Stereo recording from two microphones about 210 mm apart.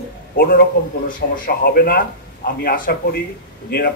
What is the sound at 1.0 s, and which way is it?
A man's voice, 40° left (ahead or behind).